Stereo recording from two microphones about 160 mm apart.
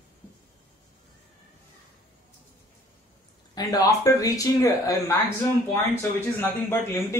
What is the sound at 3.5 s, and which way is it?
Speech, 25° left (ahead or behind).